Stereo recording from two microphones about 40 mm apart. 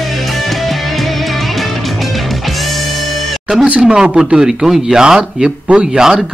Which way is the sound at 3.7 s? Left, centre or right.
Right.